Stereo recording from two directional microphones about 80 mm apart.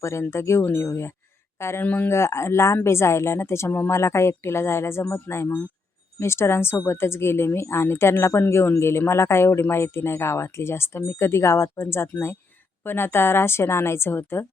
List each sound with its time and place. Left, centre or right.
0.0 s a woman's voice: left
1.9 s a woman's voice: left
2.1 s a woman's voice: left